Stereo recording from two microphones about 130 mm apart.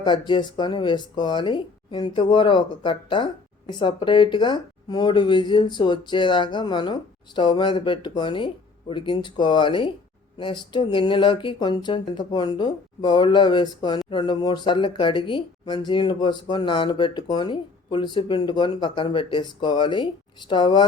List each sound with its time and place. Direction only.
0.0 s speech: 35° left (ahead or behind)